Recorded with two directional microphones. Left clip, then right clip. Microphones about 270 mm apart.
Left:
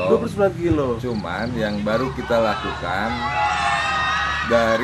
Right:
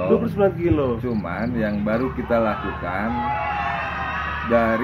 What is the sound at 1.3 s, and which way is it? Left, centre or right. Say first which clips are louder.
Speech: left 2 dB; centre.